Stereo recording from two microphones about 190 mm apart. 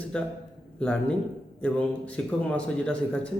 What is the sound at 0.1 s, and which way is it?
A man's voice, 5° left (ahead or behind).